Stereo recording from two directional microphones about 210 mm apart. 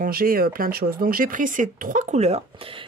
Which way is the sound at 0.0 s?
45° right (ahead or behind).